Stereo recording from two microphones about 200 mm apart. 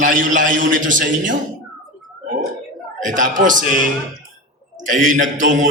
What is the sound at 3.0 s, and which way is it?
Speech, 40° right (ahead or behind).